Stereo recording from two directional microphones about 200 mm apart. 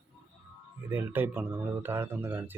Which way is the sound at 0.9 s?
10° right (ahead or behind).